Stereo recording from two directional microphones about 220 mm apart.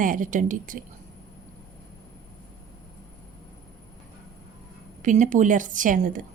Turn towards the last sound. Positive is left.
turn(degrees=-35)  # may be behind; listen again after turning